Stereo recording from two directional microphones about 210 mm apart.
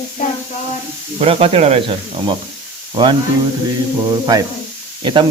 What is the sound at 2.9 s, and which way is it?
Speech, 20° right (ahead or behind).